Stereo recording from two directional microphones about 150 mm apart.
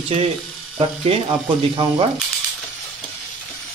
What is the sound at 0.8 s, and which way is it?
Speech, 40° right (ahead or behind).